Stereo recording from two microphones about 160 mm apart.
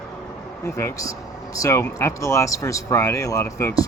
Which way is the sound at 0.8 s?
20° left (ahead or behind).